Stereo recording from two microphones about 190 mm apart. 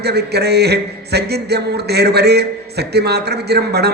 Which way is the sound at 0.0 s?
60° right (ahead or behind).